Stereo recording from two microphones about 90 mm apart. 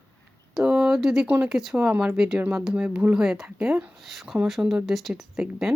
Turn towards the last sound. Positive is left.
turn(degrees=-5)  # may be behind; listen again after turning